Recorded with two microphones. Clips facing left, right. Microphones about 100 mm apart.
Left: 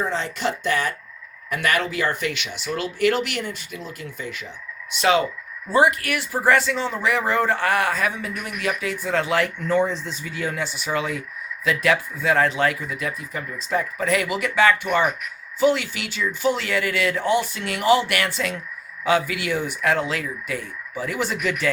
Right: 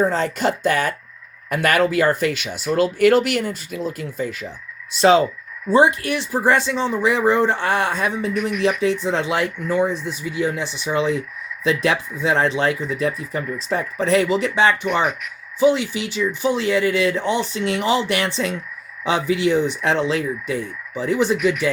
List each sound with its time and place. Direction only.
0.0 s speech: 45° right (ahead or behind); by 21.7 s 15° right (ahead or behind)